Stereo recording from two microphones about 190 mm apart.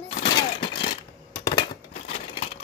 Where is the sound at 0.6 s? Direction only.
30° left (ahead or behind).